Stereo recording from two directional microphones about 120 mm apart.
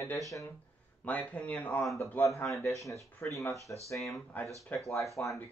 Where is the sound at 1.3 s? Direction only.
10° left (ahead or behind).